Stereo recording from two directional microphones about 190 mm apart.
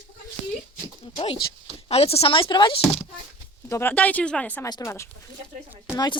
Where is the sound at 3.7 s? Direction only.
10° left (ahead or behind).